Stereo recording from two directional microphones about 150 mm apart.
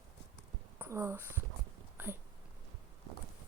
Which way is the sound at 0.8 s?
15° right (ahead or behind).